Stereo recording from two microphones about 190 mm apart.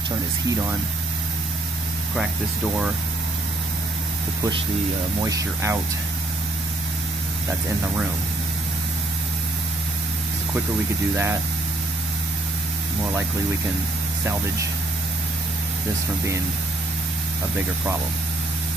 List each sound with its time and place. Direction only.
5.2 s speech: 15° right (ahead or behind)